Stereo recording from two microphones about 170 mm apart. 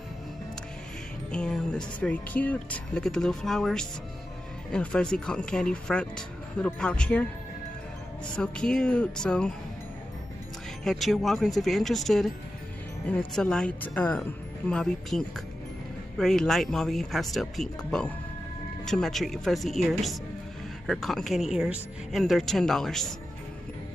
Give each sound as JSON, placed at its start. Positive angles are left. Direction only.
{"t": 1.3, "sound": "speech", "side_deg": 5}
{"t": 8.4, "sound": "speech", "side_deg": 5}
{"t": 10.8, "sound": "speech", "side_deg": 0}